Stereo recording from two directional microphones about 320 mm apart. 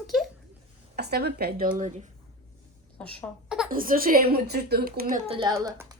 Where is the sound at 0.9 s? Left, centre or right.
Right.